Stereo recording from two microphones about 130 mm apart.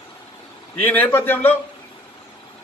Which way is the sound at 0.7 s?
10° left (ahead or behind).